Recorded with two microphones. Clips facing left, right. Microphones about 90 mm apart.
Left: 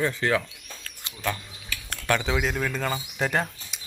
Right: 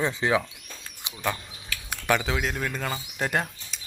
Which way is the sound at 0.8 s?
15° right (ahead or behind).